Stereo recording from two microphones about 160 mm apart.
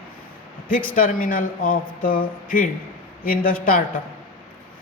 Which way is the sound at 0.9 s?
60° left (ahead or behind).